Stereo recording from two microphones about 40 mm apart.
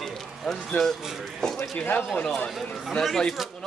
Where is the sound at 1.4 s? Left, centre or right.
Centre.